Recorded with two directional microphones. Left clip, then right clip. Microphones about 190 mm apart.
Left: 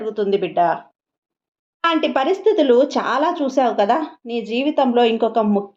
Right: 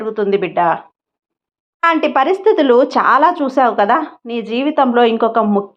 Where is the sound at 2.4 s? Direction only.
15° right (ahead or behind).